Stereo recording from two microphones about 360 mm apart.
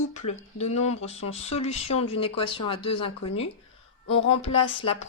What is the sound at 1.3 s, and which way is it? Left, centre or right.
A woman's voice, centre.